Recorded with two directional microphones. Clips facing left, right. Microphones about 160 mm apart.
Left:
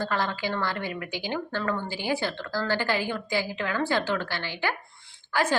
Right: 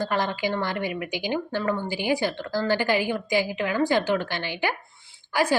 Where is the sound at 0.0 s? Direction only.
15° right (ahead or behind).